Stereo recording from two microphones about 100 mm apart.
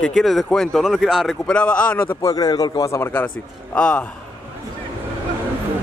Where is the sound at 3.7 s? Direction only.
10° left (ahead or behind).